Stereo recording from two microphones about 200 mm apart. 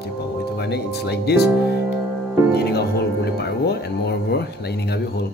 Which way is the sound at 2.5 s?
55° left (ahead or behind).